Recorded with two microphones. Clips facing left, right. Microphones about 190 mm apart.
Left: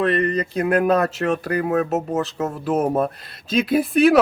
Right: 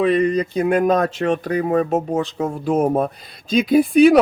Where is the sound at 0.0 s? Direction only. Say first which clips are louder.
Right 3 dB; centre (ahead or behind).